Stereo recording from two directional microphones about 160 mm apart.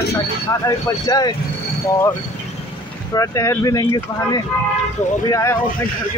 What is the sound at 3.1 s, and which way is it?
Speech, 20° left (ahead or behind).